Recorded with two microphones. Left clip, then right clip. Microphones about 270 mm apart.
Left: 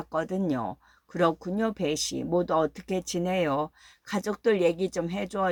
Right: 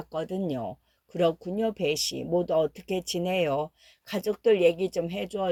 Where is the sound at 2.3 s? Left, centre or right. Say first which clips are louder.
Even; right.